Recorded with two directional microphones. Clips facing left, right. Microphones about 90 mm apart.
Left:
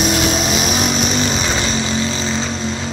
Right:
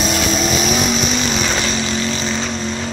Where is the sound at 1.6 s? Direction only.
25° left (ahead or behind).